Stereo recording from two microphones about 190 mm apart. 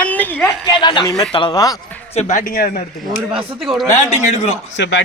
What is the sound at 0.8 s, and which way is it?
Speech, 25° left (ahead or behind).